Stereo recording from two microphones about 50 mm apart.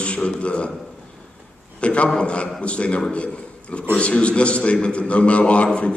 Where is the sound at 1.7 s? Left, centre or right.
Left.